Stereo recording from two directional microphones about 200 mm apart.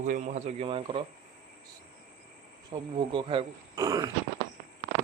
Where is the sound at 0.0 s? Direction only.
35° right (ahead or behind).